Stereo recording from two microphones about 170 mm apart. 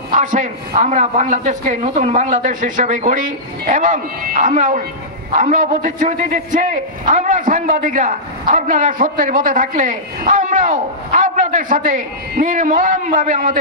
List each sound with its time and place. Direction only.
0.1 s a man's voice: 50° right (ahead or behind)